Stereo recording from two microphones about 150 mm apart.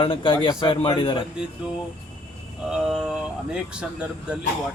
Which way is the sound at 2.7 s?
Centre (ahead or behind).